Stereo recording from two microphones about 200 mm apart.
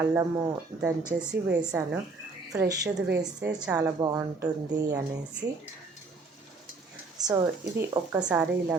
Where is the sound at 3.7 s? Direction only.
20° right (ahead or behind).